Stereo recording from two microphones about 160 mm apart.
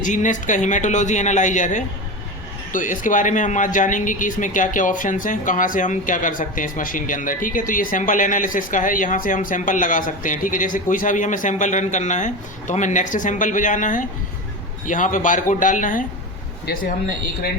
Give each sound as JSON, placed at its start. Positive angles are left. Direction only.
{"t": 0.0, "sound": "speech", "side_deg": 50}